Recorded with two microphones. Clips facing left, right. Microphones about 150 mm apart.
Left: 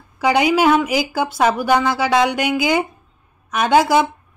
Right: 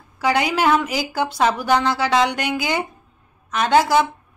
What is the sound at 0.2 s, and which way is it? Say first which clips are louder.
A woman's voice: left 4 dB; 15° left (ahead or behind).